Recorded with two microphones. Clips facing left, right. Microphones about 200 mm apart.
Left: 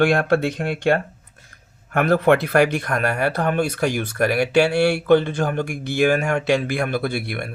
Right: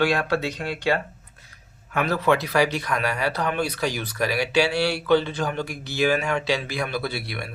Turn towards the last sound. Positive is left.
turn(degrees=50)  # may be behind; listen again after turning